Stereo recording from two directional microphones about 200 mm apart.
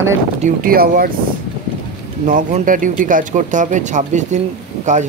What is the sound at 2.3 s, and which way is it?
Speech, 40° right (ahead or behind).